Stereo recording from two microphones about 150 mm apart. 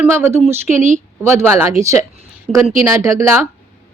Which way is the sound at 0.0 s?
15° right (ahead or behind).